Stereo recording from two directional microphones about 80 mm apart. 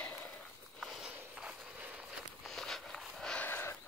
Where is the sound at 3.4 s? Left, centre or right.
Left.